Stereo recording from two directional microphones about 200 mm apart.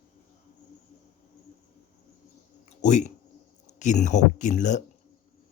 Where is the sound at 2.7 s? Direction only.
35° left (ahead or behind).